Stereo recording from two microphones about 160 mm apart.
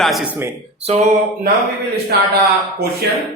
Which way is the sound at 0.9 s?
45° right (ahead or behind).